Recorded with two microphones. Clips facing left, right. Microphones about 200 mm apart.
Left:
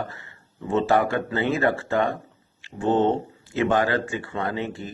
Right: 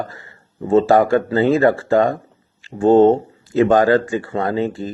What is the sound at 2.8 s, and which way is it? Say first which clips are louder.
Speech: right 10 dB; 50° right (ahead or behind).